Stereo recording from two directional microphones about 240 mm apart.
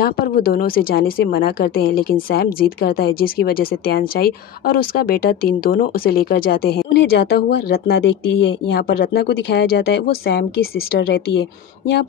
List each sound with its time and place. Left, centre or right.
0.0 s a woman's voice: left